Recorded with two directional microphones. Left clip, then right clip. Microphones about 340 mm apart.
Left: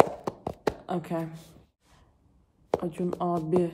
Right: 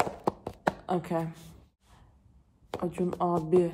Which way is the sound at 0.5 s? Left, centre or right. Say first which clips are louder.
Left 2 dB; centre.